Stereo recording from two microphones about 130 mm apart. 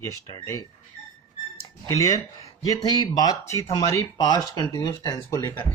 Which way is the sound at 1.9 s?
25° left (ahead or behind).